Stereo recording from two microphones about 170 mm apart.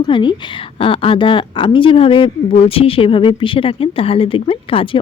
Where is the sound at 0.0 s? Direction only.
30° left (ahead or behind).